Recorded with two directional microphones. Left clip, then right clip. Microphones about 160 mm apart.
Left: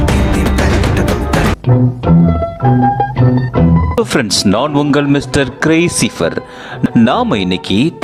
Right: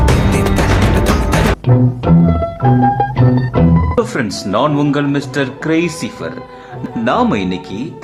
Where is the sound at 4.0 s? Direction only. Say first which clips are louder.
Left 6 dB; 50° left (ahead or behind).